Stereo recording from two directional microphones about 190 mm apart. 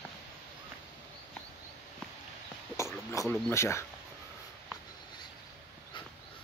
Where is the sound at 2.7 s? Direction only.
15° left (ahead or behind).